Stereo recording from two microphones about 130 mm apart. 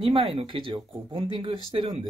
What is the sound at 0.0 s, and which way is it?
Speech, 40° right (ahead or behind).